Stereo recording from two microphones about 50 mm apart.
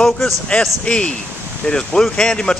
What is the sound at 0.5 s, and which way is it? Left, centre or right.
Speech, left.